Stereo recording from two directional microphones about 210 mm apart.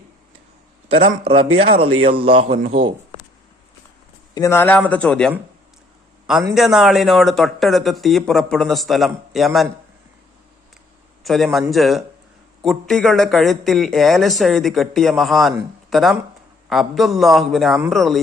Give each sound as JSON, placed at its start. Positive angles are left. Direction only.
{"t": 0.9, "sound": "speech", "side_deg": -25}
{"t": 4.4, "sound": "a man's voice", "side_deg": 10}
{"t": 6.5, "sound": "speech", "side_deg": 0}
{"t": 11.2, "sound": "a man's voice", "side_deg": 0}